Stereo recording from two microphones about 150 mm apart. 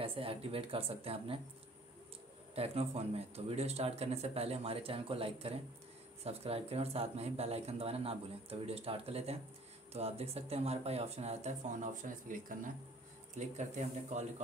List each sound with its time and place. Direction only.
0.0 s speech: 40° right (ahead or behind)
2.5 s speech: 40° right (ahead or behind)